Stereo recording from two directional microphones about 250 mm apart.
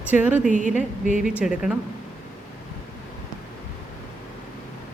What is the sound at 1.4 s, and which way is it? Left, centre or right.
Speech, centre.